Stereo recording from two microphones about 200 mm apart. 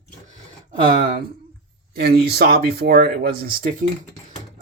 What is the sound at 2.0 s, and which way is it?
Speech, 50° right (ahead or behind).